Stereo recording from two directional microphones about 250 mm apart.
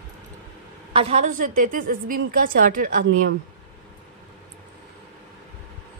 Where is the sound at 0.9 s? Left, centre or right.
Right.